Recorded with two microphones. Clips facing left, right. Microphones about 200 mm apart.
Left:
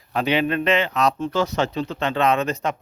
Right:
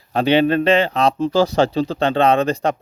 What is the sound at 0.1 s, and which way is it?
Speech, 30° right (ahead or behind).